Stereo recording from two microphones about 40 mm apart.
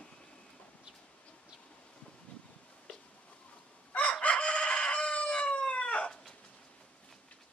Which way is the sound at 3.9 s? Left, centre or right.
Left.